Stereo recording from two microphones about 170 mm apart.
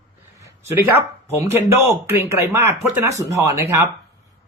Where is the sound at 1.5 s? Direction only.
15° right (ahead or behind).